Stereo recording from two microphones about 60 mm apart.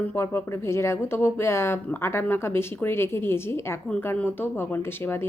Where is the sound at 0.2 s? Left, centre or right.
Left.